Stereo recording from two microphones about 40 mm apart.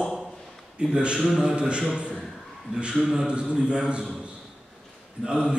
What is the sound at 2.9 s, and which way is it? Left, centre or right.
Speech, centre.